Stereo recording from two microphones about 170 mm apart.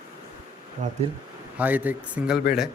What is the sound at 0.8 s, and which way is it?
Speech, 45° right (ahead or behind).